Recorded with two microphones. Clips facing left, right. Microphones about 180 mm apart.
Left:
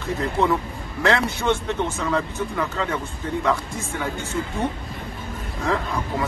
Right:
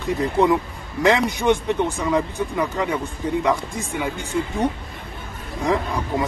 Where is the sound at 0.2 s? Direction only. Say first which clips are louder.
Right 3 dB; 15° right (ahead or behind).